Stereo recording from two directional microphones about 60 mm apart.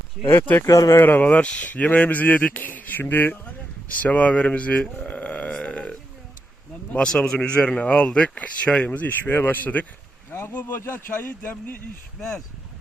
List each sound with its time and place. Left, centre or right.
0.2 s speech: centre
0.7 s speech: left
1.0 s speech: left
3.9 s burping: left
6.9 s speech: centre; by 10.8 s left
10.8 s speech: left